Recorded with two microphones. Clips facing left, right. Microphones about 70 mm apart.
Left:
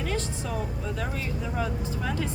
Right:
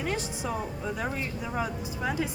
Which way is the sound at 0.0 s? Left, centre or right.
Centre.